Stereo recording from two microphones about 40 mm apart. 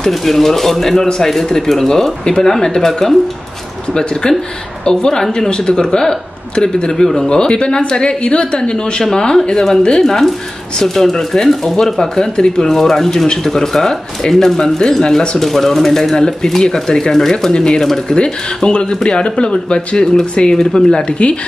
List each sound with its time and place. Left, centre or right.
0.1 s speech: centre
3.9 s a woman's voice: centre
7.2 s a woman's voice: left
18.1 s a woman's voice: left
21.2 s speech: left